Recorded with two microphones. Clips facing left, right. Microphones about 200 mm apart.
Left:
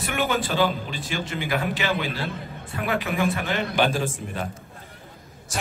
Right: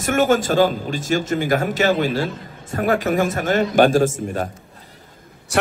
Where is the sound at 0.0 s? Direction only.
45° right (ahead or behind).